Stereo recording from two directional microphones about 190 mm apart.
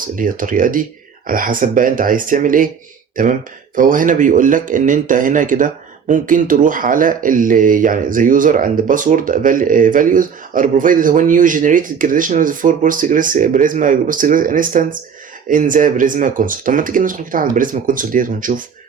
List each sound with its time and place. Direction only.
0.2 s speech: 45° right (ahead or behind)